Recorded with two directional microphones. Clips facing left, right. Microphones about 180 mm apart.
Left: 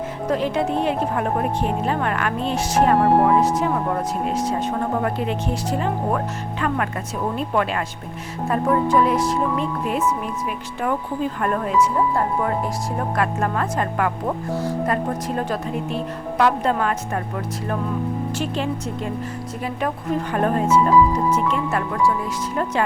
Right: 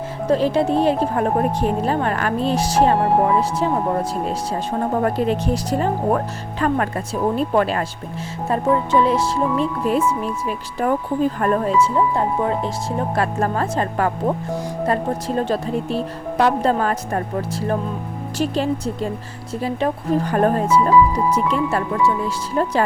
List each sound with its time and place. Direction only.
0.3 s a woman's voice: 30° right (ahead or behind)
5.0 s a woman's voice: 40° right (ahead or behind)
12.1 s a woman's voice: 25° right (ahead or behind)
15.4 s a woman's voice: 30° right (ahead or behind)